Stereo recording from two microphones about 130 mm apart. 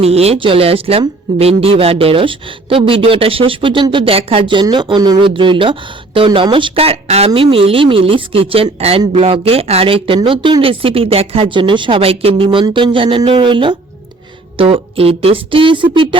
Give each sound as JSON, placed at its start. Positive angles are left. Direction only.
{"t": 0.0, "sound": "a woman's voice", "side_deg": -50}